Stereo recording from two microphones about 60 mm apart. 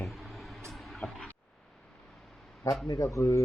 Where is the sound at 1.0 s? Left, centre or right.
Left.